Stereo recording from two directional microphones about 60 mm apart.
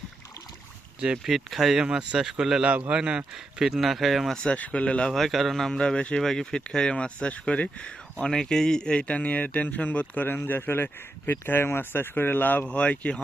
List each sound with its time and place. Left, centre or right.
1.2 s speech: centre
1.8 s speech: centre
3.3 s speech: centre
4.4 s speech: left
5.1 s speech: centre; by 12.6 s left
12.6 s speech: left